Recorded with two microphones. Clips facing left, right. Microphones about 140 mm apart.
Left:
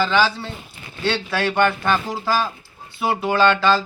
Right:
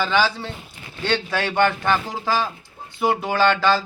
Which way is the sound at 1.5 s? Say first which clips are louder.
Right 1 dB; 20° right (ahead or behind).